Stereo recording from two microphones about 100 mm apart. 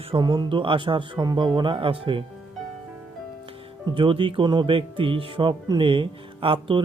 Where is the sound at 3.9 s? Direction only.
60° right (ahead or behind).